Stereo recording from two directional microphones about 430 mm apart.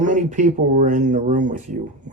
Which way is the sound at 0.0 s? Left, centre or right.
Centre.